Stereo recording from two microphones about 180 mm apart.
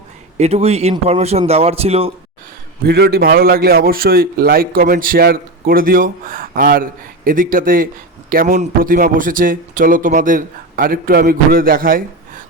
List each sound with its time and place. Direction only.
0.3 s speech: 35° right (ahead or behind)
2.8 s a man's voice: 60° right (ahead or behind)